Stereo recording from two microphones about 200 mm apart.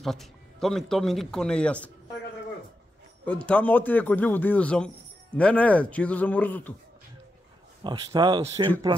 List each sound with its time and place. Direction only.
0.0 s speech: centre (ahead or behind)
3.4 s speech: 5° left (ahead or behind)
7.8 s speech: 20° right (ahead or behind)